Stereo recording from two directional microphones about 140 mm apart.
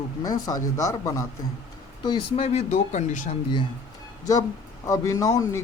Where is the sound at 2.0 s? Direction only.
45° left (ahead or behind).